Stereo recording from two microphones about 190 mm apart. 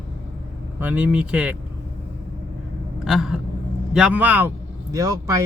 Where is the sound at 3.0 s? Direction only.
Centre (ahead or behind).